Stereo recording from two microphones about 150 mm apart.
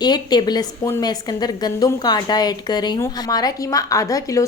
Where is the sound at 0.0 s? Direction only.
30° left (ahead or behind).